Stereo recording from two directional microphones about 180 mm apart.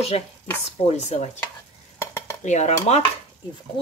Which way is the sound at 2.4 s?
40° left (ahead or behind).